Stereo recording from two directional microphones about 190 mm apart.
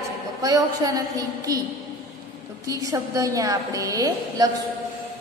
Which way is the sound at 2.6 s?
15° right (ahead or behind).